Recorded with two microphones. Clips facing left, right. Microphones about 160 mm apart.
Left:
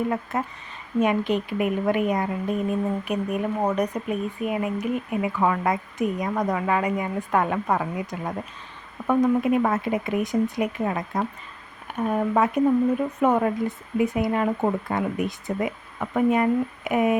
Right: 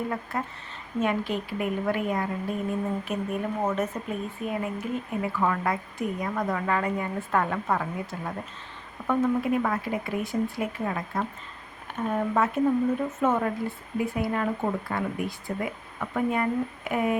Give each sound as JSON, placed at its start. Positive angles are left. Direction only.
{"t": 0.1, "sound": "a woman's voice", "side_deg": 20}
{"t": 9.0, "sound": "a woman's voice", "side_deg": 15}